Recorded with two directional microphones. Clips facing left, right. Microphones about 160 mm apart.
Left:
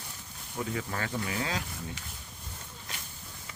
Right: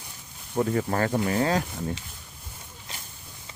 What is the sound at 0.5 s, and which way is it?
Speech, 50° right (ahead or behind).